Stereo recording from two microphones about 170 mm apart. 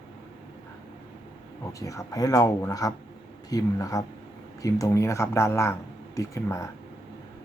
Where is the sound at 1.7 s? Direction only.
20° left (ahead or behind).